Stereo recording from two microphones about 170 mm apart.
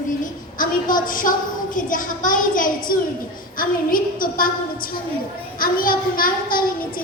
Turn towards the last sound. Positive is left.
turn(degrees=55)  # may be behind; listen again after turning